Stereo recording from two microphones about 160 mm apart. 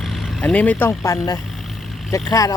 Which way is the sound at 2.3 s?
20° left (ahead or behind).